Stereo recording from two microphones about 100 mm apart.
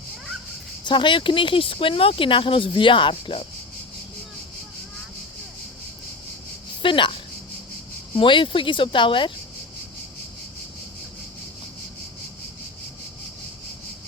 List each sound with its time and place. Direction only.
0.9 s speech: 50° left (ahead or behind)
6.8 s speech: 55° left (ahead or behind)